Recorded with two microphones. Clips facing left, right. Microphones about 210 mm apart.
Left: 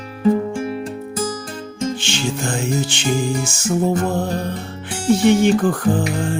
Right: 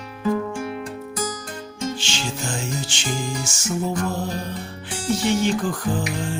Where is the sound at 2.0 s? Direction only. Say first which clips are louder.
Left 6 dB; 55° left (ahead or behind).